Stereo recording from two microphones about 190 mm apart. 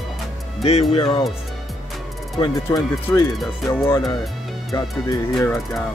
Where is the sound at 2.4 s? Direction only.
20° left (ahead or behind).